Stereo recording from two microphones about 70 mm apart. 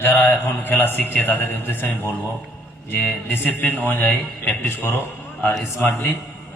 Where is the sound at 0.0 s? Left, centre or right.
Left.